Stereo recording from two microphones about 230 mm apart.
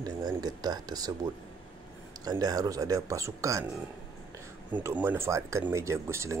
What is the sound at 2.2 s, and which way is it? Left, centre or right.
Speech, centre.